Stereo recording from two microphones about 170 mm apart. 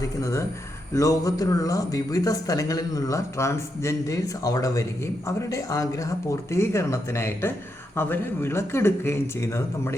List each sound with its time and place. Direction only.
0.2 s speech: 15° left (ahead or behind)